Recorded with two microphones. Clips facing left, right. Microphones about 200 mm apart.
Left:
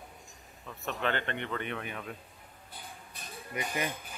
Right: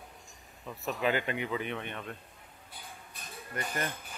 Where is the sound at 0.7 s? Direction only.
Centre (ahead or behind).